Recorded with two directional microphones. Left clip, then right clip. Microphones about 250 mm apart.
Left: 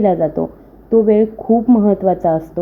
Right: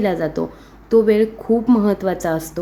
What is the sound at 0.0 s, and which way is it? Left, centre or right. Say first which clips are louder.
A woman's voice: left 5 dB; centre.